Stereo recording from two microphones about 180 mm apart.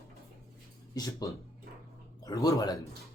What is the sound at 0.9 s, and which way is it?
A man's voice, 20° left (ahead or behind).